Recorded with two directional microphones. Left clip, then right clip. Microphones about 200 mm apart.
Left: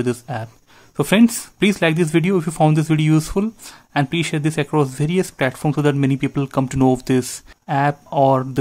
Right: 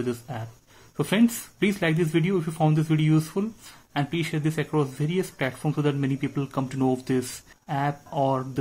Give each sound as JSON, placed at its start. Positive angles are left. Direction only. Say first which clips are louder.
{"t": 0.0, "sound": "speech", "louder": "left 8 dB", "side_deg": 35}